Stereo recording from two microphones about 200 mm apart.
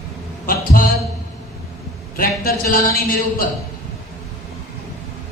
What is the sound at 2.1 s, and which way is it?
A man's voice, 45° left (ahead or behind).